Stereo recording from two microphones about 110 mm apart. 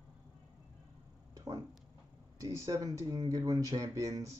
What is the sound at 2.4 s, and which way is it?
Speech, 30° right (ahead or behind).